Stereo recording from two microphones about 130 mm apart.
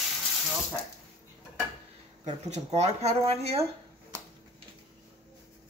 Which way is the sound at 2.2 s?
60° right (ahead or behind).